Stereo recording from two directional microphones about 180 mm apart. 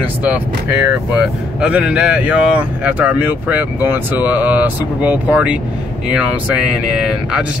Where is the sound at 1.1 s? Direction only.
5° right (ahead or behind).